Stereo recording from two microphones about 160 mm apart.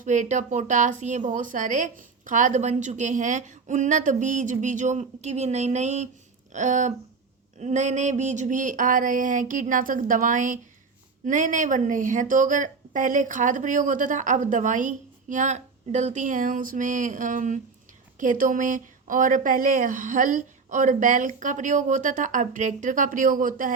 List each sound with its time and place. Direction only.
0.0 s a woman's voice: 50° right (ahead or behind)